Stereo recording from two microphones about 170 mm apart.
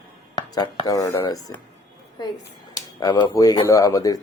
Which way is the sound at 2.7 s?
25° left (ahead or behind).